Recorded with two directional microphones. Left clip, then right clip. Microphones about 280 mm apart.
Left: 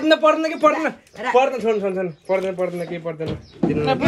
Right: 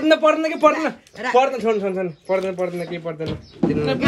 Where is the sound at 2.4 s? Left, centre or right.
Right.